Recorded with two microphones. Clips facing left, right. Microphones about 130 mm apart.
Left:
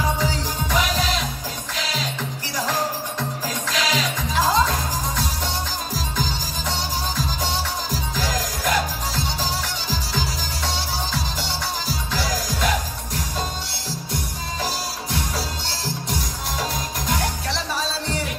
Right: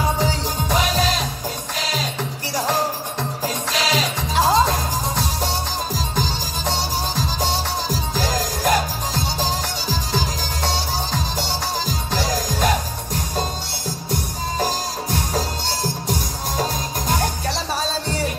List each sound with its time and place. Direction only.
0.2 s music: 35° right (ahead or behind)
2.5 s music: 30° right (ahead or behind)
8.2 s music: 35° right (ahead or behind)
12.1 s music: 40° right (ahead or behind)
14.6 s music: 45° right (ahead or behind)